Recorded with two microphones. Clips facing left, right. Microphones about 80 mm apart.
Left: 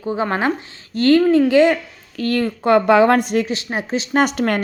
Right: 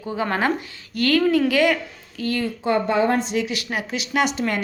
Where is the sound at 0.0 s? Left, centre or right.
Left.